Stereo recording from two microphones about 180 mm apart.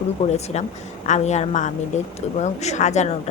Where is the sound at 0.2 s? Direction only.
35° left (ahead or behind).